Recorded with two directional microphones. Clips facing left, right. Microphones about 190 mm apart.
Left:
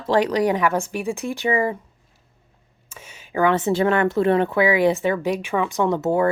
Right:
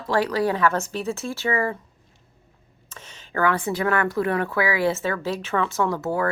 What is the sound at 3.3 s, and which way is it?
A woman's voice, 20° left (ahead or behind).